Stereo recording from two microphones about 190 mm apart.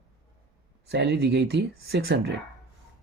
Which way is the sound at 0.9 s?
60° right (ahead or behind).